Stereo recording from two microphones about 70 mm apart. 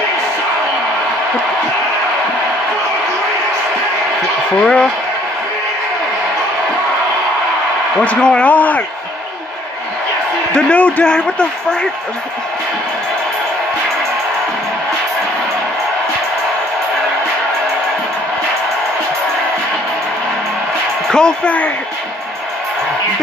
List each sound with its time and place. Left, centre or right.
4.6 s a man's voice: centre
8.0 s speech: centre
10.5 s a man's voice: centre
21.1 s a man's voice: centre